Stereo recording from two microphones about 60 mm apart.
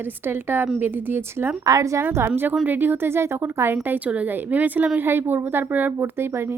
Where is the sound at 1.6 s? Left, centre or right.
Right.